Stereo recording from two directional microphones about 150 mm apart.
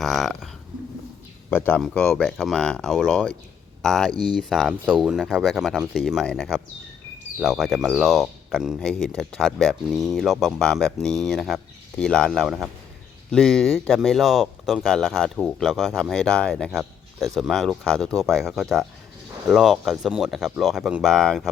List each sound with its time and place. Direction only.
0.0 s speech: centre (ahead or behind)
1.5 s speech: 15° left (ahead or behind)
4.1 s speech: 30° right (ahead or behind)
4.4 s speech: centre (ahead or behind)